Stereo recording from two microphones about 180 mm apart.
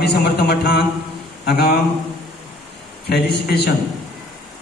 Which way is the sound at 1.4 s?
65° left (ahead or behind).